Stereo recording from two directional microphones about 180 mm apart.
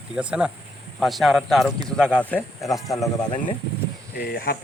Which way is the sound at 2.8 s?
20° left (ahead or behind).